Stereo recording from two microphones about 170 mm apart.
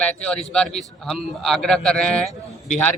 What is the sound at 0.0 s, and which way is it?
A man's voice, 5° left (ahead or behind).